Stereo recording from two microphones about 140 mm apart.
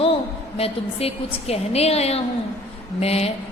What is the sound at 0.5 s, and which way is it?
Speech, 45° left (ahead or behind).